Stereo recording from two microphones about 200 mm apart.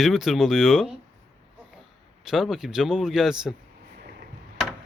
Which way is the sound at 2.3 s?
Centre (ahead or behind).